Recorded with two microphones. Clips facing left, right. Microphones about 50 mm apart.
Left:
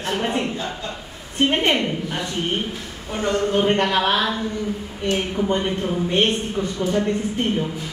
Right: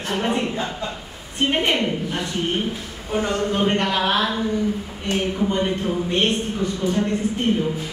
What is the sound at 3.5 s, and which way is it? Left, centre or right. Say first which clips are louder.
Speech: left 3 dB; centre.